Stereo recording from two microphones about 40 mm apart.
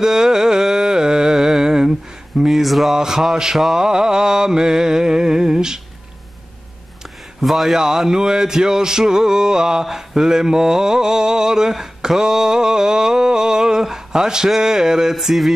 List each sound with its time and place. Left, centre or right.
0.0 s a sound: centre
2.4 s a sound: centre
2.9 s speech: centre
3.5 s mantra: centre
3.8 s speech: centre
7.4 s speech: centre